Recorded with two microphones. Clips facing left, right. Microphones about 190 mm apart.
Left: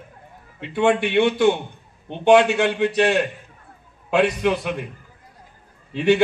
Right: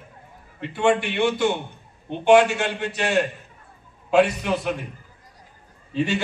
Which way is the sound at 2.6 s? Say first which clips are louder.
Left 7 dB; 60° left (ahead or behind).